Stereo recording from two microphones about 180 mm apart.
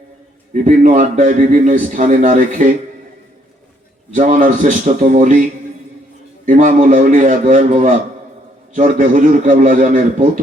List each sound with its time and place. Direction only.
0.5 s a man's voice: 45° right (ahead or behind)
4.1 s a man's voice: 45° right (ahead or behind)
6.4 s a man's voice: 50° right (ahead or behind)